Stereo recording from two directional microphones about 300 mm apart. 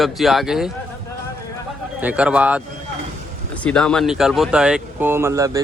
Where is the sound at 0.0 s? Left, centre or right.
Centre.